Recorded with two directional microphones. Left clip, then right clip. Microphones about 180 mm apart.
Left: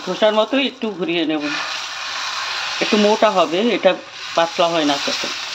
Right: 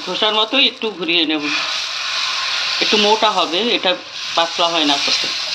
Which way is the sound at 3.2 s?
45° left (ahead or behind).